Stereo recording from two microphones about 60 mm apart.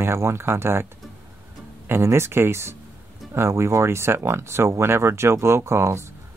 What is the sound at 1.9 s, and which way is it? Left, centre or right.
Speech, right.